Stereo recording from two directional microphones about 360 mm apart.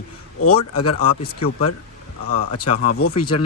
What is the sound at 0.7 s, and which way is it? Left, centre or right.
Speech, left.